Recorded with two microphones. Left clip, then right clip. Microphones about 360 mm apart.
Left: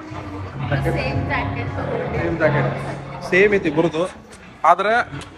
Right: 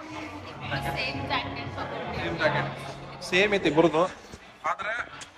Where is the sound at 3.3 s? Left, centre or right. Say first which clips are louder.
Left 8 dB; centre.